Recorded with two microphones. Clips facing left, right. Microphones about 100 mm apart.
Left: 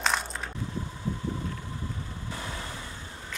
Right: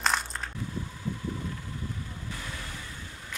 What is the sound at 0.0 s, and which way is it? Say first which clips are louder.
Crushing: even; centre (ahead or behind).